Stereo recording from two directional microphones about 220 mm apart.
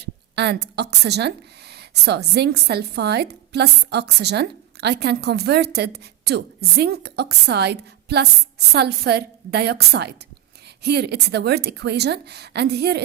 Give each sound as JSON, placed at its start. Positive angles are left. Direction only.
{"t": 0.0, "sound": "speech", "side_deg": -50}